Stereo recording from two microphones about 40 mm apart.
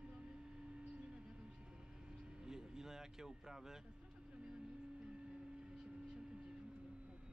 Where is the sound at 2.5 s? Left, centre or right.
Centre.